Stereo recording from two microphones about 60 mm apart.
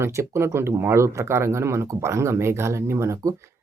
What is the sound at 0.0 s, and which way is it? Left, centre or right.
Speech, right.